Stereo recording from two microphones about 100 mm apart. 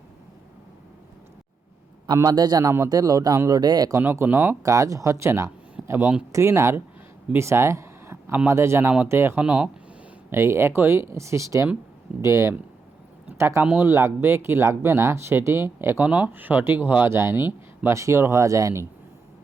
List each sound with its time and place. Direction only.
2.3 s speech: 45° right (ahead or behind)
4.0 s speech: 25° right (ahead or behind)
5.8 s a sound: 10° right (ahead or behind)
6.3 s speech: 30° right (ahead or behind)
7.3 s a sound: 25° right (ahead or behind)
8.4 s speech: 25° right (ahead or behind)
9.4 s speech: 10° right (ahead or behind)
10.2 s speech: 25° right (ahead or behind)